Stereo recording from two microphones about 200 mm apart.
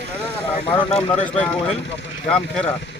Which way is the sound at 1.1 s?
5° left (ahead or behind).